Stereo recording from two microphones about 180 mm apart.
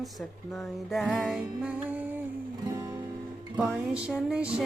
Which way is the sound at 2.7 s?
15° right (ahead or behind).